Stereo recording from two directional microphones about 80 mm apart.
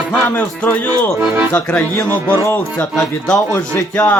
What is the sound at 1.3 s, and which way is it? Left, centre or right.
Speech, right.